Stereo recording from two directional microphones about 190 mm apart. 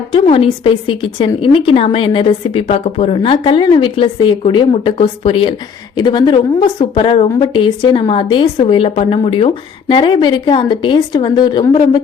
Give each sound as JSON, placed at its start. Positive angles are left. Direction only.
{"t": 0.1, "sound": "a woman's voice", "side_deg": 30}